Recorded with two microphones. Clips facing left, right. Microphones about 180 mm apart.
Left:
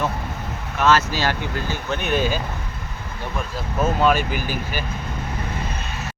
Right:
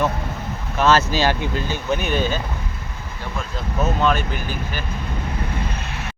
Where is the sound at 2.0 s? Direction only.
Centre (ahead or behind).